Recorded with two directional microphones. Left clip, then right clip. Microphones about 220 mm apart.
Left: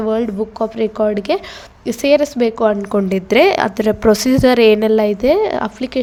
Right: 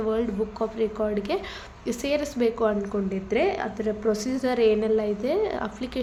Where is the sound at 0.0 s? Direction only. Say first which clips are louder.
Left 8 dB; 35° left (ahead or behind).